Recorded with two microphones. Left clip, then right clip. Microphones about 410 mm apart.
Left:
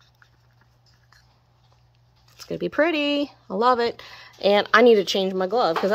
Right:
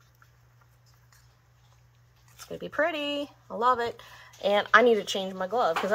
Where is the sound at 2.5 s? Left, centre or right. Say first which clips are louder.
Left 6 dB; left.